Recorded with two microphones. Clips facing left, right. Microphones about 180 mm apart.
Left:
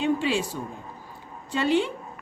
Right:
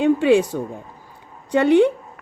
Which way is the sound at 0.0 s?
55° right (ahead or behind).